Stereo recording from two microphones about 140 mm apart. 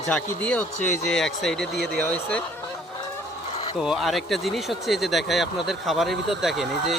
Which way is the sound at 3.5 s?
45° left (ahead or behind).